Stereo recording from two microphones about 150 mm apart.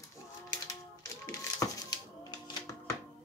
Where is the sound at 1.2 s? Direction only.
25° left (ahead or behind).